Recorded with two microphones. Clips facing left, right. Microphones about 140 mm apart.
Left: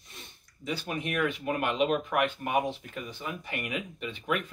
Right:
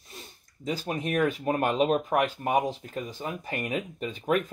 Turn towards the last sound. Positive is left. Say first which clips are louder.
# right 5 dB
turn(degrees=-40)  # may be behind; listen again after turning